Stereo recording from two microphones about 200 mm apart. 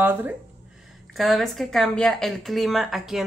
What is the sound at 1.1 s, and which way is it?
Speech, centre (ahead or behind).